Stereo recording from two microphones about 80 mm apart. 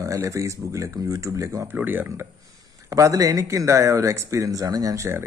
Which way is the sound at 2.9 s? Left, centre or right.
Right.